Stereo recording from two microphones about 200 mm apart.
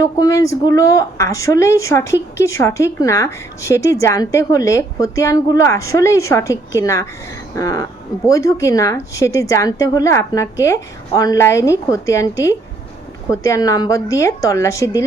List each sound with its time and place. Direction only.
0.0 s a woman's voice: 15° left (ahead or behind)